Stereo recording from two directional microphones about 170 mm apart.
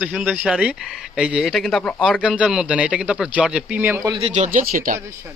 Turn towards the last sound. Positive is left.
turn(degrees=-55)  # may be behind; listen again after turning